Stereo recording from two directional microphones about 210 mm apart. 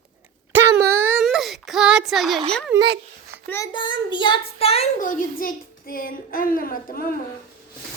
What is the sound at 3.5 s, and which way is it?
A child's voice, 20° left (ahead or behind).